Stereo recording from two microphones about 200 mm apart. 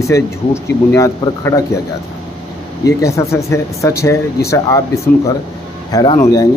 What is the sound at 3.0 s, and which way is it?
Speech, 15° left (ahead or behind).